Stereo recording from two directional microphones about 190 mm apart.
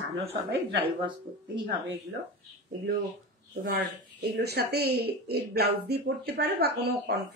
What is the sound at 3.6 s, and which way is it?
Speech, 55° right (ahead or behind).